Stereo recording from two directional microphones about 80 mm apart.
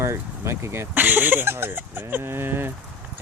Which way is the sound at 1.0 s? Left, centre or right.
Right.